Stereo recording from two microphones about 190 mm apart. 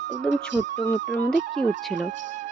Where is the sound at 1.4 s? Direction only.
40° right (ahead or behind).